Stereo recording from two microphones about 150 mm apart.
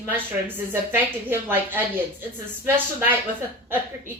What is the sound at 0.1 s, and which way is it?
A woman's voice, 15° right (ahead or behind).